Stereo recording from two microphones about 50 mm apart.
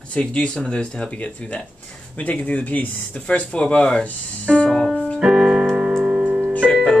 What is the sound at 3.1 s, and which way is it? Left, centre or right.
Speech, left.